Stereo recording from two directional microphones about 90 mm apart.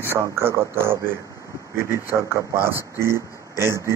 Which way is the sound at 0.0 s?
25° right (ahead or behind).